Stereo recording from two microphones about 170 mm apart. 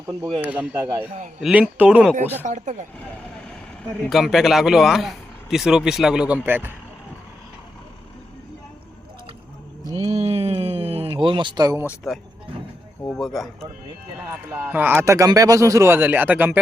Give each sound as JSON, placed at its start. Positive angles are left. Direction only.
{"t": 0.4, "sound": "speech", "side_deg": -10}
{"t": 2.4, "sound": "speech", "side_deg": -45}
{"t": 4.0, "sound": "speech", "side_deg": 0}
{"t": 10.1, "sound": "speech", "side_deg": -40}
{"t": 13.0, "sound": "speech", "side_deg": 5}
{"t": 14.3, "sound": "speech", "side_deg": -10}